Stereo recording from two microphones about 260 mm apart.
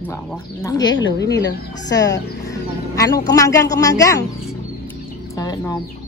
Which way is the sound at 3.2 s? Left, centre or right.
Centre.